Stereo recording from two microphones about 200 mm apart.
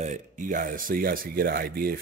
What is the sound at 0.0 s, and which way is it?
Speech, 40° right (ahead or behind).